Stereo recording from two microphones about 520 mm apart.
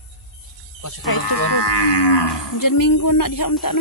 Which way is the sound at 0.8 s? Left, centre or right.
Left.